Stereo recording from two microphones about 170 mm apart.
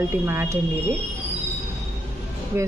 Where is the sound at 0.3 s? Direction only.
15° right (ahead or behind).